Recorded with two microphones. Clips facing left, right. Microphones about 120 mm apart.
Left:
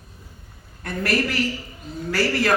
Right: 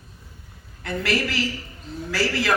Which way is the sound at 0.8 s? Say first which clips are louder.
Left 1 dB; 50° left (ahead or behind).